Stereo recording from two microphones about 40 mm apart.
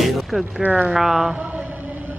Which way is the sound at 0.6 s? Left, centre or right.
Right.